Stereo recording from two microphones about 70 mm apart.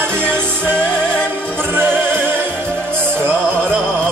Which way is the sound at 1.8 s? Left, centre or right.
Right.